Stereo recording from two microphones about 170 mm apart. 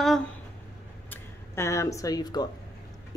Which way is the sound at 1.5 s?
15° left (ahead or behind).